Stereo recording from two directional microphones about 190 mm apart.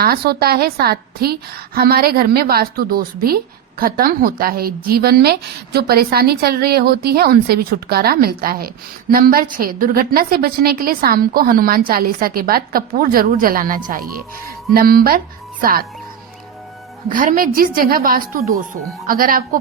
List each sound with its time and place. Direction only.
0.0 s a woman's voice: 55° right (ahead or behind)
17.1 s a woman's voice: 45° right (ahead or behind)